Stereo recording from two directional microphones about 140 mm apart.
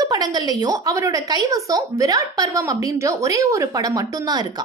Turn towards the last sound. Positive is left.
turn(degrees=-30)  # may be behind; listen again after turning